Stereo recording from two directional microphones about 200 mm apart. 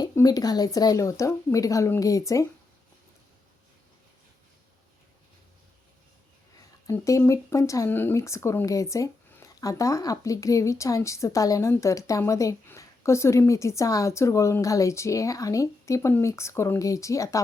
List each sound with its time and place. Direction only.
0.0 s speech: 20° left (ahead or behind)
6.8 s speech: 15° left (ahead or behind)